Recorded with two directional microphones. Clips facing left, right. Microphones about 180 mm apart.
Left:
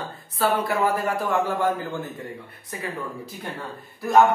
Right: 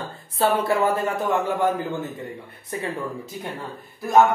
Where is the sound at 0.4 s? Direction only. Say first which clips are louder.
Right 2 dB; 25° right (ahead or behind).